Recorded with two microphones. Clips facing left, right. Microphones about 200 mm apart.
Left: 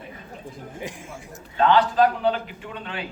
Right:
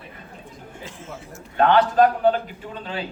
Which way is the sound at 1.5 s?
55° right (ahead or behind).